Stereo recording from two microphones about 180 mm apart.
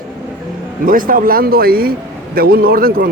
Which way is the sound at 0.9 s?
50° right (ahead or behind).